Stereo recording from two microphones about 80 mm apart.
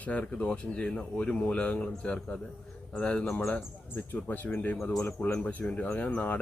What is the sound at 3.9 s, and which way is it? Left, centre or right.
Speech, left.